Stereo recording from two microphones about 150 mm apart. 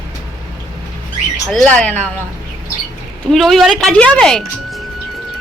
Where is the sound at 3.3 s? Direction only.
Centre (ahead or behind).